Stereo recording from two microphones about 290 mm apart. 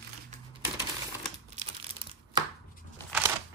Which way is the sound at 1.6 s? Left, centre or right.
Centre.